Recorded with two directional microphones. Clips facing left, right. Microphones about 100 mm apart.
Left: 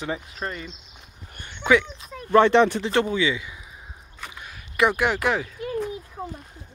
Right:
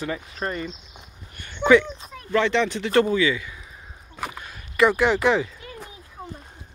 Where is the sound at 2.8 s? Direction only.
20° left (ahead or behind); by 5.5 s 5° left (ahead or behind).